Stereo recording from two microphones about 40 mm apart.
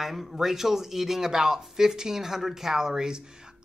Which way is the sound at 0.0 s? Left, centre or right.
Centre.